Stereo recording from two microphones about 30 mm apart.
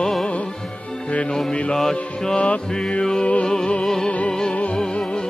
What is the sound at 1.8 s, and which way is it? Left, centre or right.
Mantra, centre.